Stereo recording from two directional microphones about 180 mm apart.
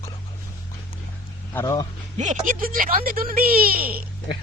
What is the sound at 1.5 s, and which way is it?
Speech, 20° left (ahead or behind).